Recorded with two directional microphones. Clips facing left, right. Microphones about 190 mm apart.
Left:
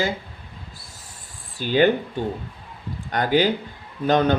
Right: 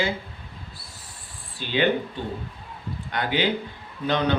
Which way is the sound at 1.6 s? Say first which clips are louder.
Left 6 dB; 45° left (ahead or behind).